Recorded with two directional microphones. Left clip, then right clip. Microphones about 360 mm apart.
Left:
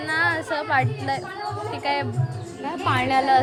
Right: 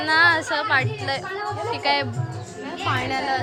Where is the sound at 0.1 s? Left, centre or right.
Centre.